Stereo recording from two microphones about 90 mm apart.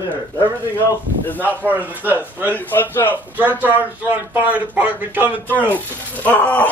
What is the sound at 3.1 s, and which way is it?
Speech, 20° right (ahead or behind).